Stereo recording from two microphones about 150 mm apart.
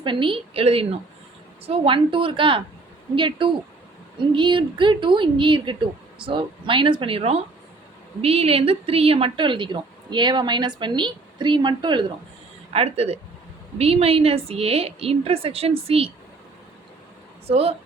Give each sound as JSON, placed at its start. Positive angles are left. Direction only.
{"t": 0.0, "sound": "a woman's voice", "side_deg": -35}
{"t": 12.7, "sound": "a woman's voice", "side_deg": -45}
{"t": 17.4, "sound": "speech", "side_deg": -40}